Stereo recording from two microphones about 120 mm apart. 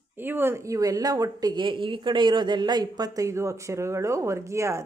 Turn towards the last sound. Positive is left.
turn(degrees=-25)  # may be behind; listen again after turning